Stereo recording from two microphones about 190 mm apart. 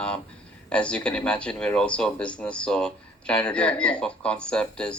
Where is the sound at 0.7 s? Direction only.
5° left (ahead or behind).